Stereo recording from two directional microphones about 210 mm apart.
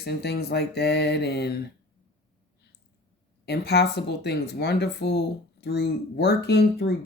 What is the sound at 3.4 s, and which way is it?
Speech, 50° left (ahead or behind).